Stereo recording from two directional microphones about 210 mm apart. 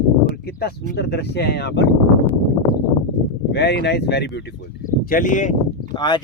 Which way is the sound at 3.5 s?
50° left (ahead or behind).